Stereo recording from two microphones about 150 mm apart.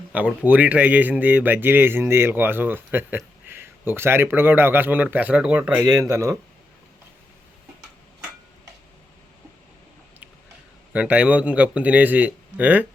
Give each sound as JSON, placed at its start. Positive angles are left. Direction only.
{"t": 0.4, "sound": "speech", "side_deg": -10}
{"t": 5.8, "sound": "speech", "side_deg": -25}
{"t": 10.9, "sound": "speech", "side_deg": -5}